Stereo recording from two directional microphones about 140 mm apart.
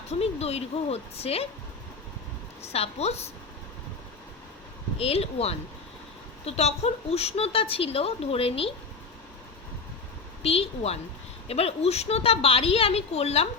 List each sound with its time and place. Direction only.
0.1 s a woman's voice: 50° left (ahead or behind)
2.6 s a woman's voice: 45° left (ahead or behind)
4.9 s a woman's voice: 45° left (ahead or behind)
10.4 s a woman's voice: 45° left (ahead or behind)